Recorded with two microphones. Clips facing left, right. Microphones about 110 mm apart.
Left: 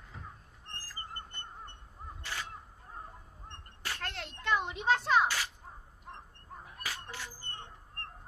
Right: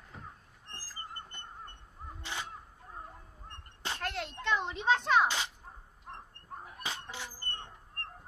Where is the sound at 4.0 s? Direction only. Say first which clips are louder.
Right 5 dB; 5° right (ahead or behind).